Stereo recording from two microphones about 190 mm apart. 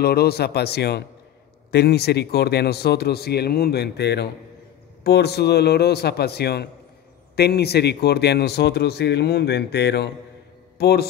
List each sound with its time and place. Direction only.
0.0 s a man's voice: 55° left (ahead or behind)